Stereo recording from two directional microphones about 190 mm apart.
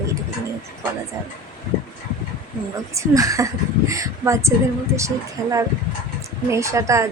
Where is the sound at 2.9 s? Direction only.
15° right (ahead or behind).